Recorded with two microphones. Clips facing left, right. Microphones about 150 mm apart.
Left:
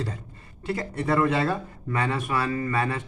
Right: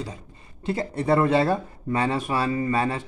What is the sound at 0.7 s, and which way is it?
Speech, 30° right (ahead or behind).